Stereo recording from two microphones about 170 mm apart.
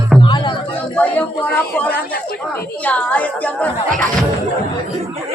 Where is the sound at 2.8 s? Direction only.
10° left (ahead or behind).